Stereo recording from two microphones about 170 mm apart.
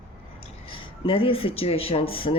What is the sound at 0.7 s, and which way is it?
Speech, 30° left (ahead or behind).